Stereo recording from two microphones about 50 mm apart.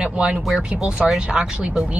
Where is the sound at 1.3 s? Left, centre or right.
Centre.